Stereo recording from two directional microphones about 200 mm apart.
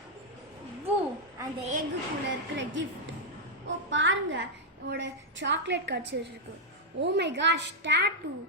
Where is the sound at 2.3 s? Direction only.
65° right (ahead or behind).